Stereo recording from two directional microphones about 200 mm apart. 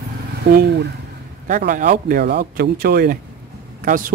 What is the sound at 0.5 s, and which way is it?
Speech, 55° right (ahead or behind).